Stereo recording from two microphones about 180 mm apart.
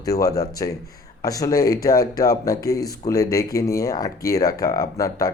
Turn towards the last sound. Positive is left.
turn(degrees=20)  # may be behind; listen again after turning